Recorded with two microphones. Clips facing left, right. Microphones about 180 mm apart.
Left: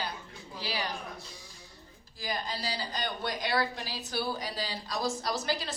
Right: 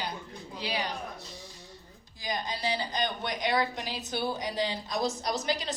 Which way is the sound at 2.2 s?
20° right (ahead or behind).